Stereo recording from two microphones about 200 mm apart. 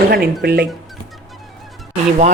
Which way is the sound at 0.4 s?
55° right (ahead or behind).